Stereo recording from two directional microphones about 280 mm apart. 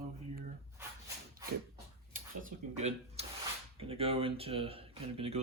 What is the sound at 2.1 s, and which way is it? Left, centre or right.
Speech, right.